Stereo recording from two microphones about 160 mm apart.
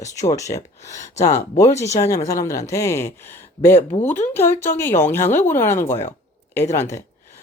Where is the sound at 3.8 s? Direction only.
40° left (ahead or behind).